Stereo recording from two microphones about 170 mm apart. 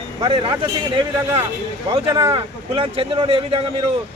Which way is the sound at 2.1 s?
20° right (ahead or behind).